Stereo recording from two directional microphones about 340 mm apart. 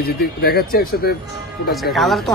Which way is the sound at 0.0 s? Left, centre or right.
Left.